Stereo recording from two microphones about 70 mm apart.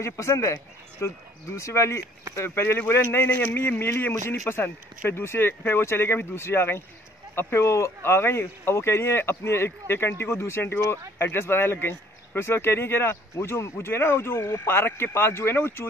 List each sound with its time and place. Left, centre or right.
0.0 s speech: left